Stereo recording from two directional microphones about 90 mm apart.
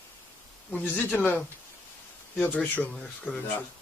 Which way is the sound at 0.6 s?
20° left (ahead or behind).